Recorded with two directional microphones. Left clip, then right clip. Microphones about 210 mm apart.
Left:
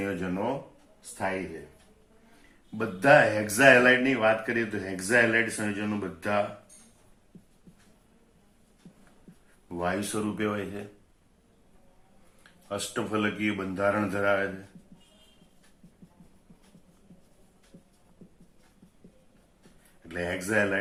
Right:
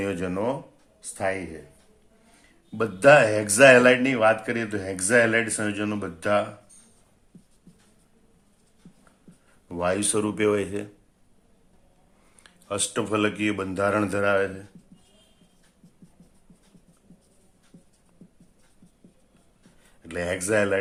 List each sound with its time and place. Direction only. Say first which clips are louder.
0.0 s speech: right 4 dB; 50° right (ahead or behind)
2.7 s speech: right 4 dB; 50° right (ahead or behind)
9.7 s speech: right 5 dB; 50° right (ahead or behind)
12.4 s speech: right 5 dB; 50° right (ahead or behind)
20.1 s speech: right 5 dB; 55° right (ahead or behind)